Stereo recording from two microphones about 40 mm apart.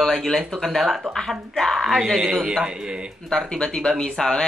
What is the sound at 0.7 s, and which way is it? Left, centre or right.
Speech, centre.